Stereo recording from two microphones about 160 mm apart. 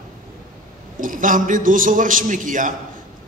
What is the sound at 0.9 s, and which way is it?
A man's voice, 55° right (ahead or behind).